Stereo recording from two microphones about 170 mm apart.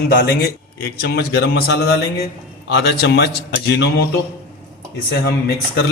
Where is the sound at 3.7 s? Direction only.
85° left.